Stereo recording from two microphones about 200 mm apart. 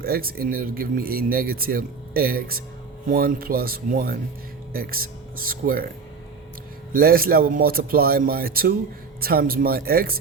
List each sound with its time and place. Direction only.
0.0 s speech: 45° right (ahead or behind)
6.9 s speech: 45° right (ahead or behind)